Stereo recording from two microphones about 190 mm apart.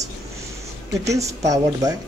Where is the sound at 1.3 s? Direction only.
15° right (ahead or behind).